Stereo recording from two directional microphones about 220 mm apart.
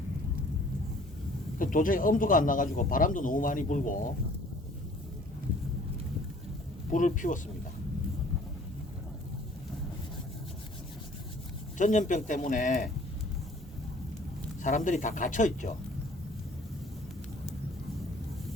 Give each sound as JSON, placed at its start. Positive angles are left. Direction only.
{"t": 1.5, "sound": "speech", "side_deg": 40}
{"t": 6.9, "sound": "speech", "side_deg": 35}
{"t": 11.8, "sound": "speech", "side_deg": 35}
{"t": 14.6, "sound": "speech", "side_deg": 35}